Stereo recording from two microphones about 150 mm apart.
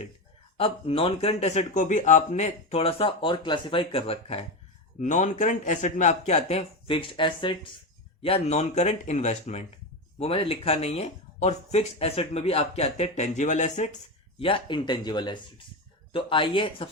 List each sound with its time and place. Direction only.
0.5 s speech: 40° left (ahead or behind)
4.9 s speech: 55° left (ahead or behind); by 7.6 s 35° left (ahead or behind)
8.2 s speech: 45° left (ahead or behind)
14.3 s speech: 35° left (ahead or behind)